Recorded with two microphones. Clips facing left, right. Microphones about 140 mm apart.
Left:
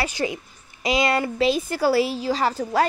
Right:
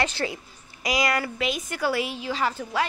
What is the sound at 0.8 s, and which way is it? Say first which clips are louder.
A woman's voice: left 4 dB; 25° left (ahead or behind).